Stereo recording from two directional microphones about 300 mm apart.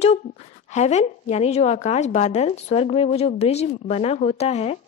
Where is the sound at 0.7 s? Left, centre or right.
Left.